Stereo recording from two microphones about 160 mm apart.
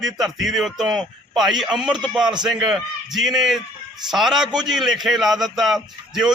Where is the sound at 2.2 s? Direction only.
25° right (ahead or behind).